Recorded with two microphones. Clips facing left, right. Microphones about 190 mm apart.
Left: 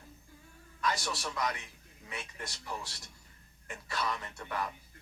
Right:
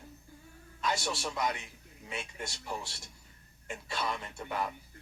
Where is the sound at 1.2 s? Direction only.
25° right (ahead or behind).